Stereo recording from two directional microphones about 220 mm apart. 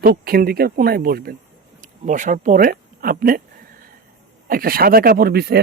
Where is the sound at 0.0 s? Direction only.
45° right (ahead or behind).